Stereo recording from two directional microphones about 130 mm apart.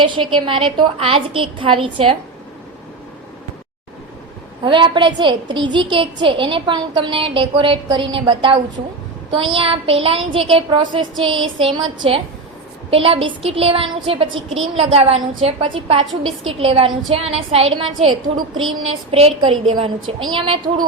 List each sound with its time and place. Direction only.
0.0 s a woman's voice: 40° right (ahead or behind)
4.6 s a woman's voice: 40° right (ahead or behind)